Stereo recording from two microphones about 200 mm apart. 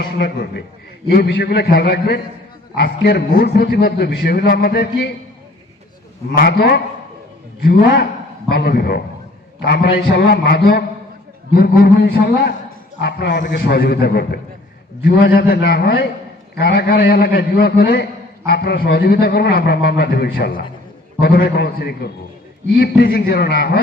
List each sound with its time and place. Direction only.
0.0 s a man's voice: 55° left (ahead or behind)
6.3 s a man's voice: 50° left (ahead or behind)